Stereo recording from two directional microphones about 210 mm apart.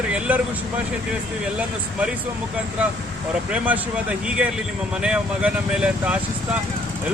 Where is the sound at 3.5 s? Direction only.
5° right (ahead or behind).